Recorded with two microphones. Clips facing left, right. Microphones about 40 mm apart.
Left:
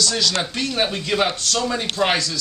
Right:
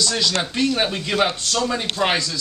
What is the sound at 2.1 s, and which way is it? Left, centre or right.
Speech, centre.